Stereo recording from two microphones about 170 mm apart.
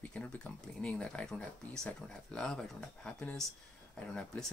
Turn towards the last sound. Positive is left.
turn(degrees=5)  # may be behind; listen again after turning